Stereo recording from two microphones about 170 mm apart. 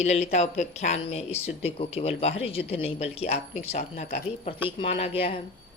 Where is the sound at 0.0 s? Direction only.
40° left (ahead or behind).